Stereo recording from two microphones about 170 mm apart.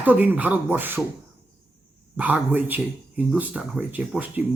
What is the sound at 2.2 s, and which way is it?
Speech, 10° right (ahead or behind).